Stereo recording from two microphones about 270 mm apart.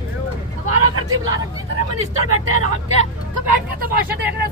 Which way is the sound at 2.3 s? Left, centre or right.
Right.